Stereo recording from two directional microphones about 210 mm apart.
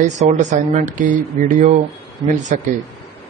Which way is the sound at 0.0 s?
35° right (ahead or behind).